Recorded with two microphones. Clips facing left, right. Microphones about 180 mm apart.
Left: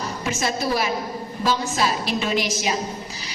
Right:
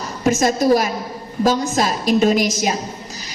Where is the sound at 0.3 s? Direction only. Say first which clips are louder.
Right 10 dB; 45° right (ahead or behind).